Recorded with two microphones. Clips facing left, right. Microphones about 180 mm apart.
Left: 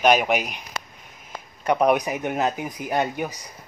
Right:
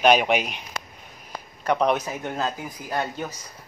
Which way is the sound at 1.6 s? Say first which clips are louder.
Left 3 dB; 10° left (ahead or behind).